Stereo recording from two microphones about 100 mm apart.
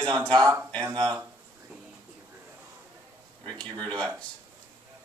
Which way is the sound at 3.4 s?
10° left (ahead or behind).